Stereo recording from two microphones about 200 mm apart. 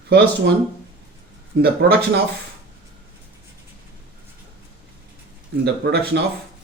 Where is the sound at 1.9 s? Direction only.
50° right (ahead or behind).